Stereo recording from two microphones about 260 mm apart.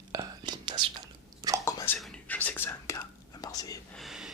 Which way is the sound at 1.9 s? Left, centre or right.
Centre.